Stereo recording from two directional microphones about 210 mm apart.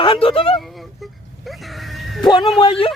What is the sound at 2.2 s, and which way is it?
Speech, 20° left (ahead or behind).